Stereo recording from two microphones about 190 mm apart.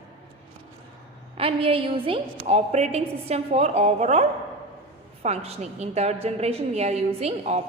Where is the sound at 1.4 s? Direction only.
30° right (ahead or behind).